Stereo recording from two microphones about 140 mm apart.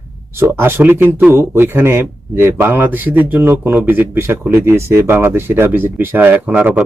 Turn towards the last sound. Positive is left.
turn(degrees=-10)  # may be behind; listen again after turning